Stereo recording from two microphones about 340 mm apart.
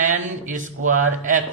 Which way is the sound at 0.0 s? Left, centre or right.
Right.